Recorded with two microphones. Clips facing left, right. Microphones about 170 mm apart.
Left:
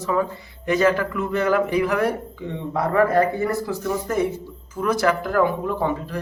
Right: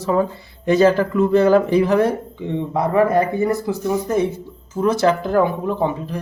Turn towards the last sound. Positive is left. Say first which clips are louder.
# right 3 dB
turn(degrees=-20)  # may be behind; listen again after turning